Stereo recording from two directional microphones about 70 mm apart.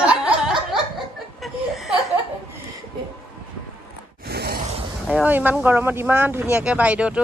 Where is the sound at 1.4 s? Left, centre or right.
Centre.